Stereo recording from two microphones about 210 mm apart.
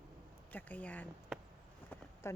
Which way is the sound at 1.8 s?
10° left (ahead or behind).